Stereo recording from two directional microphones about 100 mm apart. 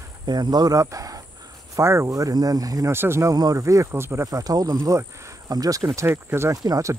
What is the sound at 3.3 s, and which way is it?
Speech, 40° right (ahead or behind).